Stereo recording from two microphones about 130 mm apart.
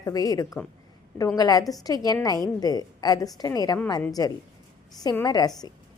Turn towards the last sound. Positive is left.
turn(degrees=30)  # may be behind; listen again after turning